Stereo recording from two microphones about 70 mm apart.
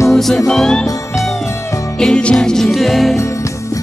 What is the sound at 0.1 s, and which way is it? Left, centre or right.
Music, centre.